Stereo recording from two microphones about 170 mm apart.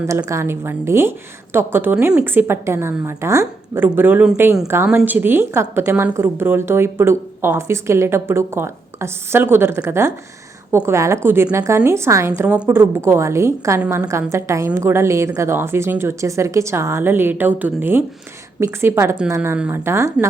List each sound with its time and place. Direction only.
0.0 s a woman's voice: 15° right (ahead or behind)